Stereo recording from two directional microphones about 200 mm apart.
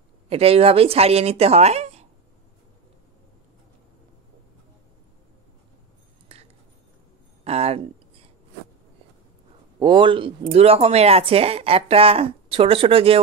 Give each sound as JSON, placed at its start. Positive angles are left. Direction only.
{"t": 0.3, "sound": "speech", "side_deg": -30}
{"t": 6.2, "sound": "a sound", "side_deg": -30}
{"t": 9.8, "sound": "speech", "side_deg": -25}